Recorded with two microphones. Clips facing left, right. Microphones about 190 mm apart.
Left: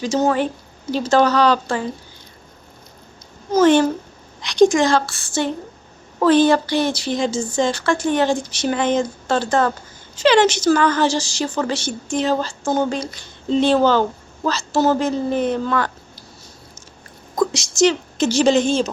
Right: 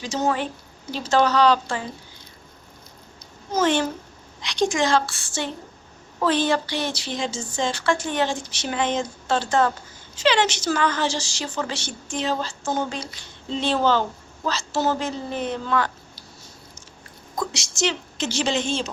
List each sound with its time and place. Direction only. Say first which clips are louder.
0.0 s speech: left 6 dB; 45° left (ahead or behind)
3.6 s a woman's voice: left 8 dB; 45° left (ahead or behind)
17.3 s a woman's voice: left 9 dB; 45° left (ahead or behind)